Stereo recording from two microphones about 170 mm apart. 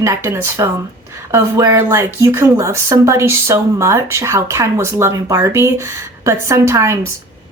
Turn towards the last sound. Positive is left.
turn(degrees=-15)  # may be behind; listen again after turning